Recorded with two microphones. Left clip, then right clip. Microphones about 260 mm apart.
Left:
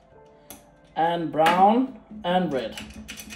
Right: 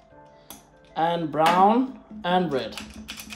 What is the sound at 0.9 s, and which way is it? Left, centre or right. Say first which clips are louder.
Speech: left 1 dB; right.